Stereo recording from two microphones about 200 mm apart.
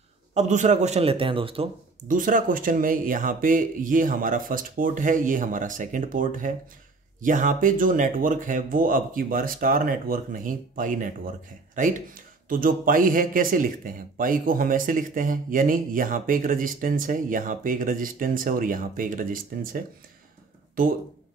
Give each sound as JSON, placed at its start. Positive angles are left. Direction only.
{"t": 0.3, "sound": "a man's voice", "side_deg": -35}
{"t": 2.0, "sound": "speech", "side_deg": -40}
{"t": 12.4, "sound": "speech", "side_deg": -45}